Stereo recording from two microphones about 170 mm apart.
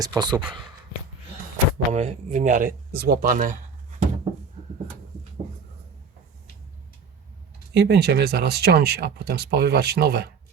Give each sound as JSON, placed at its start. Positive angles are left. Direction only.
{"t": 0.0, "sound": "speech", "side_deg": -25}
{"t": 1.9, "sound": "speech", "side_deg": -40}
{"t": 7.7, "sound": "speech", "side_deg": -75}